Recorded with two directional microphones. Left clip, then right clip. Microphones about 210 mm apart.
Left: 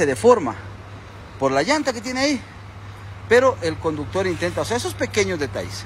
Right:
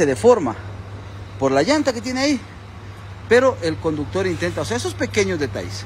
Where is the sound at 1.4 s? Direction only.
15° right (ahead or behind).